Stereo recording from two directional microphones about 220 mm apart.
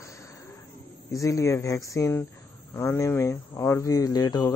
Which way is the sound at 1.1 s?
15° left (ahead or behind).